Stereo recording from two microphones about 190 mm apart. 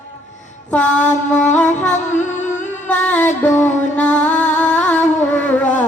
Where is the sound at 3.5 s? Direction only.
40° left (ahead or behind).